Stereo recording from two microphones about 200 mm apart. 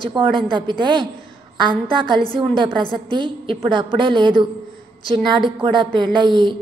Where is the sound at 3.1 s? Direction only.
25° right (ahead or behind).